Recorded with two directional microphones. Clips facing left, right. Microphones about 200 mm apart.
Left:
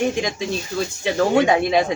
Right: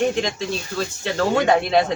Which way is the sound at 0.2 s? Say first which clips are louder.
Even; 15° left (ahead or behind).